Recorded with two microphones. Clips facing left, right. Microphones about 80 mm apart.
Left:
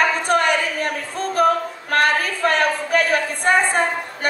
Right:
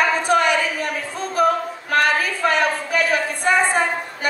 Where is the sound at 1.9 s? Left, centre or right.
Left.